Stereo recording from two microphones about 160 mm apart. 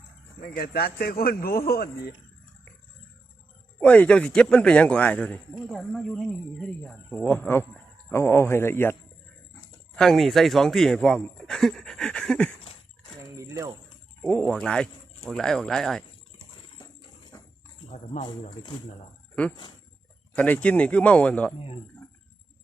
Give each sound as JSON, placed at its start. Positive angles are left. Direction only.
{"t": 0.4, "sound": "a man's voice", "side_deg": 70}
{"t": 3.8, "sound": "a man's voice", "side_deg": 5}
{"t": 9.9, "sound": "speech", "side_deg": 5}
{"t": 13.3, "sound": "jingle bell", "side_deg": -20}
{"t": 14.2, "sound": "speech", "side_deg": 5}
{"t": 17.3, "sound": "horse", "side_deg": 20}
{"t": 17.9, "sound": "speech", "side_deg": 45}
{"t": 18.3, "sound": "speech", "side_deg": 25}
{"t": 20.3, "sound": "a man's voice", "side_deg": 10}